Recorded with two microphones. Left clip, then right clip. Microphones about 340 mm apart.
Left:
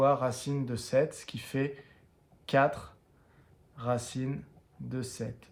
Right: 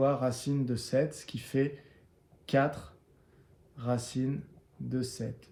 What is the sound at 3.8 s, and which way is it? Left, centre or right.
Speech, centre.